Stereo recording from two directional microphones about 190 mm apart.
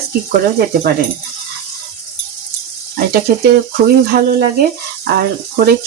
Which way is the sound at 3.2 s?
55° right (ahead or behind).